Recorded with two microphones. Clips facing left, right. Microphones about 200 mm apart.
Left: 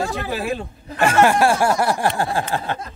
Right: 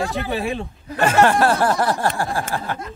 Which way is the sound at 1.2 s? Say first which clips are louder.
Left 1 dB; 10° left (ahead or behind).